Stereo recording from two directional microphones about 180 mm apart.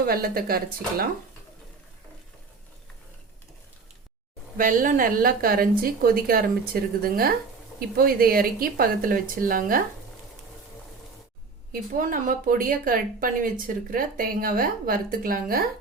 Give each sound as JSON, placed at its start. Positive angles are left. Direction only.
{"t": 0.0, "sound": "speech", "side_deg": -55}
{"t": 4.5, "sound": "speech", "side_deg": -50}
{"t": 11.7, "sound": "speech", "side_deg": -45}